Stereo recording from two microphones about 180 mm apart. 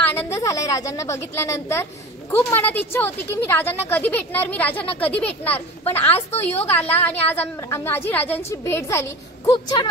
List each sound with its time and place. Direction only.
0.0 s a woman's voice: 10° left (ahead or behind)
9.5 s speech: 25° left (ahead or behind)